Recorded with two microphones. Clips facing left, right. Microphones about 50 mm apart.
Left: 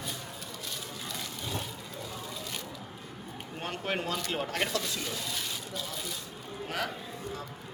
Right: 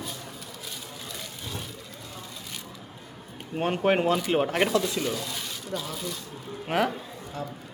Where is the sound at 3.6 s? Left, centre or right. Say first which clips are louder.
Right 11 dB; right; by 6.1 s centre.